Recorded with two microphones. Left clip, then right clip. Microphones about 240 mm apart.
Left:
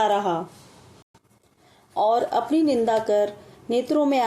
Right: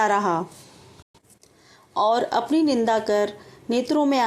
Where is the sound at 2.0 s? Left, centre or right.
Centre.